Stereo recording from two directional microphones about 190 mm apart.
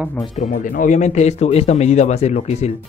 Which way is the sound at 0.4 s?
45° left (ahead or behind).